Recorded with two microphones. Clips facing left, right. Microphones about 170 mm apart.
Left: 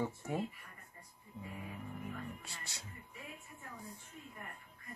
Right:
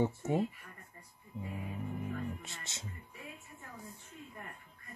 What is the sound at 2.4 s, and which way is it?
Speech, 20° right (ahead or behind).